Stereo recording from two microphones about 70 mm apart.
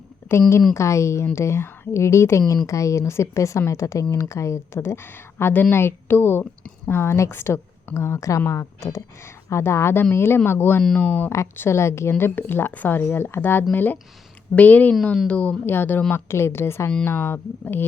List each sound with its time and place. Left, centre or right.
0.3 s speech: left
11.5 s speech: left
16.1 s speech: left